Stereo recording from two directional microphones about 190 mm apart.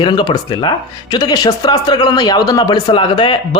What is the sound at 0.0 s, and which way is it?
Speech, 25° left (ahead or behind).